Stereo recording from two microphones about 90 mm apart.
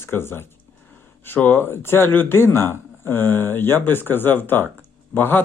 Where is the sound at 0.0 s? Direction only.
25° left (ahead or behind).